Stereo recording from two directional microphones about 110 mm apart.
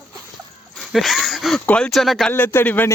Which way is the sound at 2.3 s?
20° left (ahead or behind).